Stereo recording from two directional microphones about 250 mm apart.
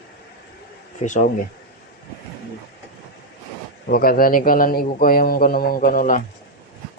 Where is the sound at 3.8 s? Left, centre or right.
Left.